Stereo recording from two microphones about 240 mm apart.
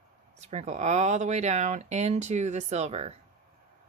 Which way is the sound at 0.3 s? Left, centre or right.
Right.